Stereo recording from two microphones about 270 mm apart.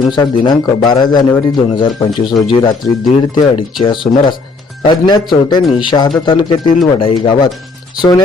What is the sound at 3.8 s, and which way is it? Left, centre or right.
Speech, centre.